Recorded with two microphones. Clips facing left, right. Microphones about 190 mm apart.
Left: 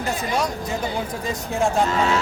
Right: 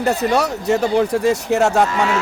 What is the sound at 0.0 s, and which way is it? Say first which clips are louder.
A man's voice: right 7 dB; 70° right (ahead or behind).